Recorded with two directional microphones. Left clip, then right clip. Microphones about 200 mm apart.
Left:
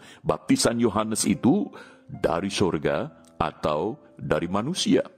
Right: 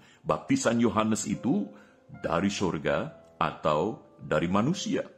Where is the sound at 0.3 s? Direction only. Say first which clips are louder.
Left 3 dB; 45° left (ahead or behind).